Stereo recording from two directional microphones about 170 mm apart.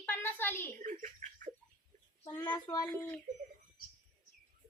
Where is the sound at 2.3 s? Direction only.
10° left (ahead or behind).